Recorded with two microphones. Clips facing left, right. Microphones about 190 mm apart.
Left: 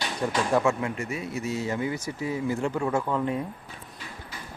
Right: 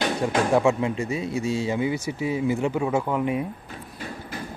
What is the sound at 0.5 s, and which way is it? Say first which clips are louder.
Speech: right 3 dB; 15° right (ahead or behind).